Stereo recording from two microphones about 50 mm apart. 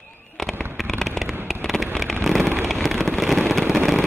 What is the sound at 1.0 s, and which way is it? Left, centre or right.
Fireworks, centre.